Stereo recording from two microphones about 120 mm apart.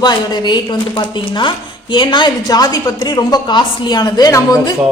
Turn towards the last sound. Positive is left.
turn(degrees=30)  # may be behind; listen again after turning